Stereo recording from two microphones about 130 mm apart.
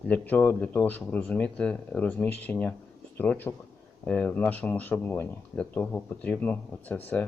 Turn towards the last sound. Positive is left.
turn(degrees=15)  # may be behind; listen again after turning